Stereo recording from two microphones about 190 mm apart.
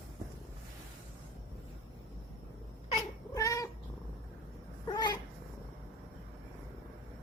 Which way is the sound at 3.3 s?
15° left (ahead or behind).